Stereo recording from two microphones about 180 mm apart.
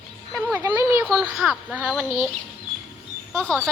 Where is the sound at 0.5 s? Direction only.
15° right (ahead or behind).